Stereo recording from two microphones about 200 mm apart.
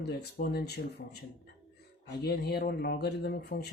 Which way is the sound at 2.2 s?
50° left (ahead or behind).